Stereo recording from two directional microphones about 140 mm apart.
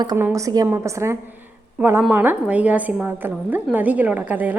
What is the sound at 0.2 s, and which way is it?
A woman's voice, 20° right (ahead or behind).